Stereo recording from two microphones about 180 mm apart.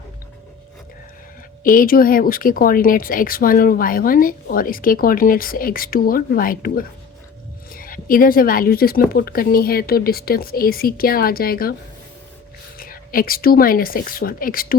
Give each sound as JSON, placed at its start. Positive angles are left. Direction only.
{"t": 1.6, "sound": "speech", "side_deg": 50}
{"t": 12.7, "sound": "speech", "side_deg": 55}